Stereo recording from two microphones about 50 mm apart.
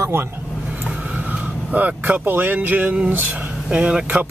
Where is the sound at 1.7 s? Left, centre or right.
Right.